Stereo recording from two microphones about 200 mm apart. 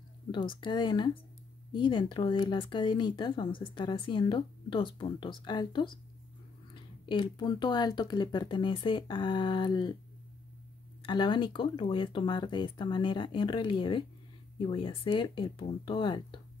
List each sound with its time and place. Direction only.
0.3 s speech: 25° left (ahead or behind)
11.0 s speech: 25° left (ahead or behind)